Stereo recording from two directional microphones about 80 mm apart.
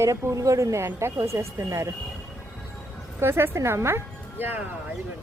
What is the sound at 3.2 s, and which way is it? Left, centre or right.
Speech, right.